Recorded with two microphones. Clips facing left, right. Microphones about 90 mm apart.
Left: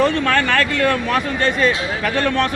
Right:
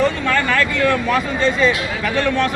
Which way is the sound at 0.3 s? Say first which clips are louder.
Left 1 dB; 60° left (ahead or behind).